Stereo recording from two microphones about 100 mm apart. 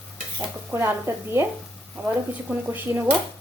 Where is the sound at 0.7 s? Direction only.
25° right (ahead or behind).